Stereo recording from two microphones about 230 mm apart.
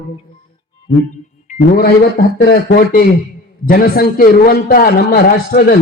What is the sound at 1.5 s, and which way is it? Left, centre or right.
A man's voice, left.